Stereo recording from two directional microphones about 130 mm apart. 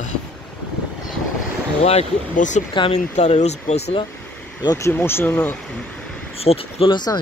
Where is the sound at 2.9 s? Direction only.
60° left (ahead or behind).